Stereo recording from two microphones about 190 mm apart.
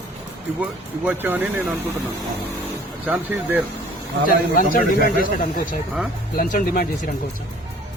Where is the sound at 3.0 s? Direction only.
10° right (ahead or behind).